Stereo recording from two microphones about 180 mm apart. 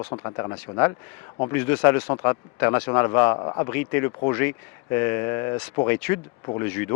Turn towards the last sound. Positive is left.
turn(degrees=15)  # may be behind; listen again after turning